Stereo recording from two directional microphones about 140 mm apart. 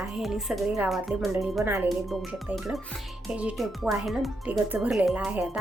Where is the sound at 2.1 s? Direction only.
Centre (ahead or behind).